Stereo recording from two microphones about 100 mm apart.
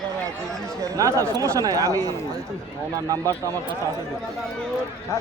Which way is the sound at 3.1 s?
35° right (ahead or behind).